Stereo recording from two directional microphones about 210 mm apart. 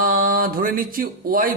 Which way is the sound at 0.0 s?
40° right (ahead or behind).